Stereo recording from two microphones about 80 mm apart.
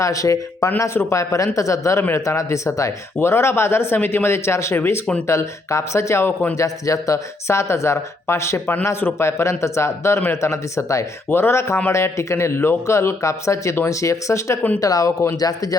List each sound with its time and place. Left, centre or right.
0.0 s speech: left
11.3 s speech: left